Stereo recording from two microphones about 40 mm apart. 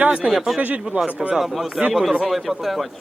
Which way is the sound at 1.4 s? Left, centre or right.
Centre.